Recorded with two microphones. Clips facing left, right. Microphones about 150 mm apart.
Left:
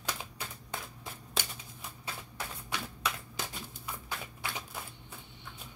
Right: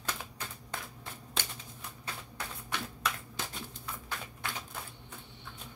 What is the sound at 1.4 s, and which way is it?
Shuffling cards, 10° left (ahead or behind).